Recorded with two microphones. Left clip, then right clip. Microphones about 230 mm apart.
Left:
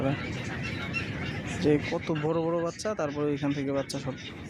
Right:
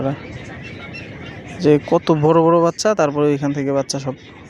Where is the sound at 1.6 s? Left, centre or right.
Right.